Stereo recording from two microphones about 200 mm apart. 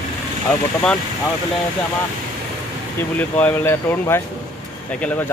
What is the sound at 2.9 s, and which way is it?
Speech, 10° left (ahead or behind).